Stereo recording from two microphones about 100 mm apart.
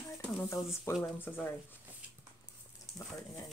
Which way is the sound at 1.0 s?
20° left (ahead or behind).